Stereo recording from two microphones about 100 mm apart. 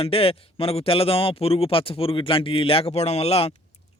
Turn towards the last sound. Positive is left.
turn(degrees=90)